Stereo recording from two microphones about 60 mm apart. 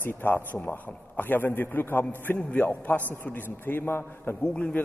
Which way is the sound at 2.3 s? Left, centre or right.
Centre.